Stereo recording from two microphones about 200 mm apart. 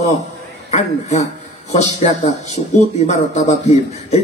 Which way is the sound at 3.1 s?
35° left (ahead or behind).